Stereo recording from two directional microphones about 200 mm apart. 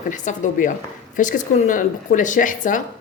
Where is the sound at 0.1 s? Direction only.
40° left (ahead or behind).